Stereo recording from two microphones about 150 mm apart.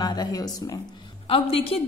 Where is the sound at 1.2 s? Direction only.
40° left (ahead or behind).